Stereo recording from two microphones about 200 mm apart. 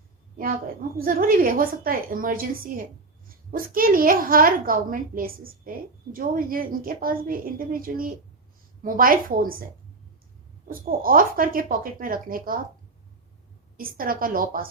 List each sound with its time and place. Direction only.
0.9 s a woman's voice: 45° right (ahead or behind)
10.7 s a woman's voice: 45° right (ahead or behind)
13.7 s a woman's voice: 45° right (ahead or behind)